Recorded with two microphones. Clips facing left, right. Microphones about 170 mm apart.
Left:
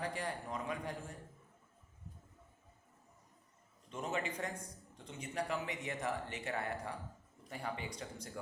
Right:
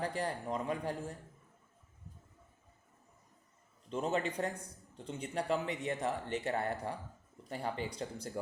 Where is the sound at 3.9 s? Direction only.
30° right (ahead or behind).